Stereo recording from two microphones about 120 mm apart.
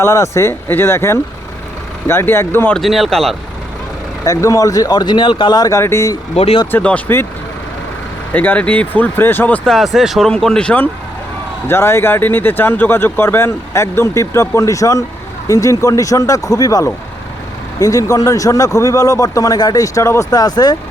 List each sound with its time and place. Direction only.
0.0 s speech: 25° left (ahead or behind)
2.7 s speech: centre (ahead or behind)
4.3 s speech: 25° left (ahead or behind)
6.3 s speech: 55° left (ahead or behind)
6.7 s speech: 15° left (ahead or behind)
8.3 s speech: 15° left (ahead or behind)
9.6 s speech: centre (ahead or behind)
11.7 s speech: 20° left (ahead or behind)